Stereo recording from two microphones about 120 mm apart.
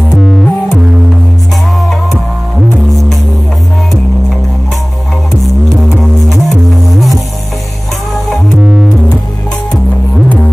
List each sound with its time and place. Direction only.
0.1 s music: centre (ahead or behind)
1.8 s music: centre (ahead or behind)
6.3 s music: centre (ahead or behind)
8.6 s music: 5° right (ahead or behind)
9.7 s music: 10° left (ahead or behind)